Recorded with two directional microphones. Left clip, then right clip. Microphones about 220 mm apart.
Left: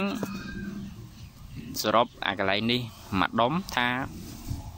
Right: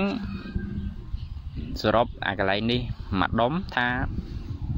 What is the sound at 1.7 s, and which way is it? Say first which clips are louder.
Speech: right 1 dB; 10° right (ahead or behind).